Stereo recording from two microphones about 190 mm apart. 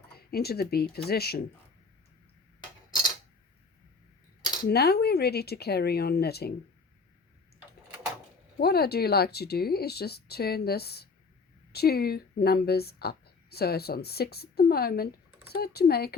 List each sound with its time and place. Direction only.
0.2 s speech: 55° left (ahead or behind)
4.6 s speech: 55° left (ahead or behind)
8.6 s speech: 55° left (ahead or behind)